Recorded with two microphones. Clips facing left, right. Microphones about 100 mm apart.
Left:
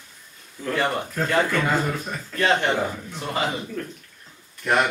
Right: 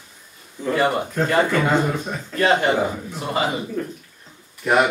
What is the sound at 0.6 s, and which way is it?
A man's voice, 10° right (ahead or behind).